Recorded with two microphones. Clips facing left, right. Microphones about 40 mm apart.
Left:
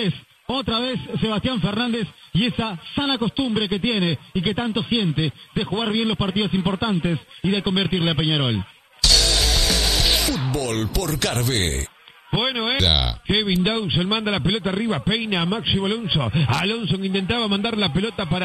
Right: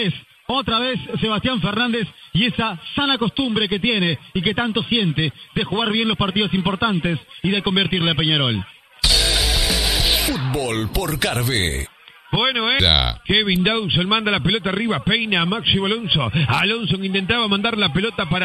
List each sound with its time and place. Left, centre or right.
0.0 s a man's voice: right
7.4 s a man's voice: right